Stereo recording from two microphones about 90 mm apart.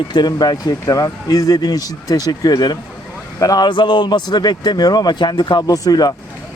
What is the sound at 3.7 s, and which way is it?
Speech, 60° left (ahead or behind).